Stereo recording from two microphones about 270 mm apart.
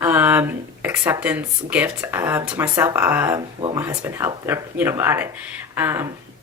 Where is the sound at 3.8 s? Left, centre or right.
Centre.